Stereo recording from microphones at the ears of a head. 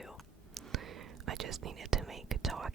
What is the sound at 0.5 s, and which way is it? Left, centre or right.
Whispering, right.